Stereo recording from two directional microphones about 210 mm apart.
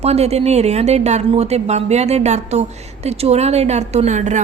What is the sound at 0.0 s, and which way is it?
A woman's voice, 30° right (ahead or behind).